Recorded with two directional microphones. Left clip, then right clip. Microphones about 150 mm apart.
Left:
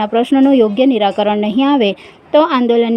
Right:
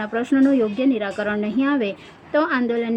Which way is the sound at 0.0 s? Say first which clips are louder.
Left 7 dB; 35° left (ahead or behind).